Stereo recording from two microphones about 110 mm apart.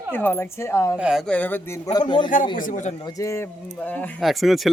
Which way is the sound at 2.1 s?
45° left (ahead or behind).